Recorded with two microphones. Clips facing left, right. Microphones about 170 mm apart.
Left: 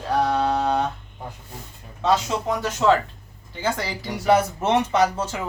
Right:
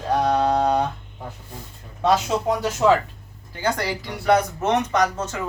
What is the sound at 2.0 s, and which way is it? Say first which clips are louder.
Speech: right 2 dB; 10° right (ahead or behind).